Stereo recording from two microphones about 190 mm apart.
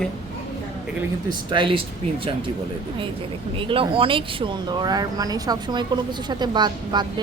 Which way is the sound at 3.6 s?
25° right (ahead or behind).